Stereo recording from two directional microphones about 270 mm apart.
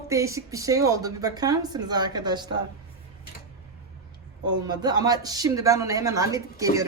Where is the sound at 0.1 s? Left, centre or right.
Centre.